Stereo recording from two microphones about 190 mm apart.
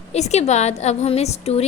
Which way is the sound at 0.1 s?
35° left (ahead or behind).